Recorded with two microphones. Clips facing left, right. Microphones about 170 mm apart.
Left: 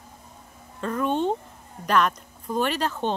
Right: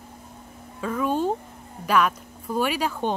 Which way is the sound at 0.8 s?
5° right (ahead or behind).